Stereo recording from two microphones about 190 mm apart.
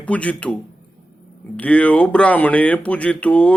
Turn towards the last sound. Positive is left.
turn(degrees=5)  # may be behind; listen again after turning